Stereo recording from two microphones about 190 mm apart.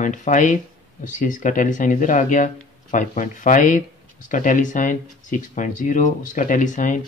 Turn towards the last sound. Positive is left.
turn(degrees=40)  # may be behind; listen again after turning